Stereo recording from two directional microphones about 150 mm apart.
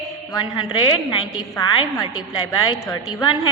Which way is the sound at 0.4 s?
30° left (ahead or behind).